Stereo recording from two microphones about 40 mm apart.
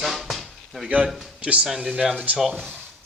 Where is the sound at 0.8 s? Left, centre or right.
Right.